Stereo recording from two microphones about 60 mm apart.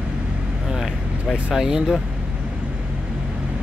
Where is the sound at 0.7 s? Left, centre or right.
Centre.